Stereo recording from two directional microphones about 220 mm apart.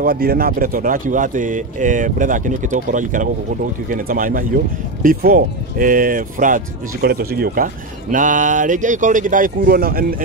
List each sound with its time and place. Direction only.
0.0 s speech: 40° right (ahead or behind)